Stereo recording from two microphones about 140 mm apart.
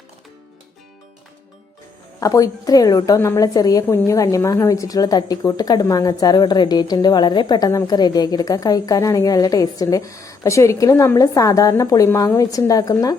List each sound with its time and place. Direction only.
2.2 s a woman's voice: 25° left (ahead or behind)